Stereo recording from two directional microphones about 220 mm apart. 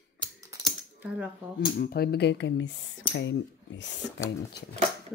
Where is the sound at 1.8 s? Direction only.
45° left (ahead or behind).